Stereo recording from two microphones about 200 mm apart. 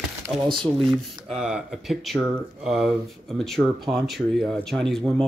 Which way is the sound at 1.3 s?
5° right (ahead or behind).